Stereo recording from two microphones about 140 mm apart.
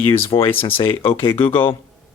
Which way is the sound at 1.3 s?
40° left (ahead or behind).